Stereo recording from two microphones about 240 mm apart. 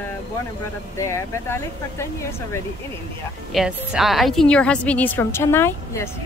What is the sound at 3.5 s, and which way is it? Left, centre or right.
A woman's voice, centre.